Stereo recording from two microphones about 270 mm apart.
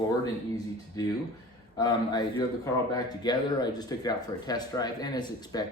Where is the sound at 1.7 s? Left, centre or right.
Centre.